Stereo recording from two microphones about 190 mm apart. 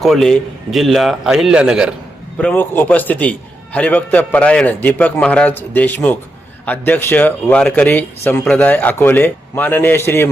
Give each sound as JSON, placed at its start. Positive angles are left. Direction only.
{"t": 0.0, "sound": "a man's voice", "side_deg": 0}
{"t": 2.4, "sound": "a man's voice", "side_deg": 10}